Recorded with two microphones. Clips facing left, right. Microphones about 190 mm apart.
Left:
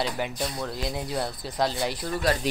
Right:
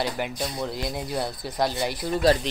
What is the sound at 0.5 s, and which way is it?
Speech, 15° right (ahead or behind).